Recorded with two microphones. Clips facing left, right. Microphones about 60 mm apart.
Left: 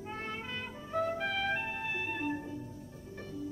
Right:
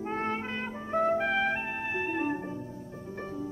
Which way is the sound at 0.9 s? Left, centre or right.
Right.